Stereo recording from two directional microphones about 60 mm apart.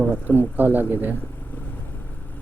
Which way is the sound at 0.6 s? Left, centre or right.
Right.